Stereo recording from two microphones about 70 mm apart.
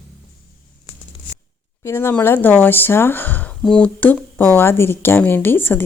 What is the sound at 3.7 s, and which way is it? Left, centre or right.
Speech, centre.